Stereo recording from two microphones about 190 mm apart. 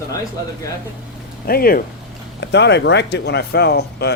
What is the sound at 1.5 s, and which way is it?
Speech, 50° left (ahead or behind).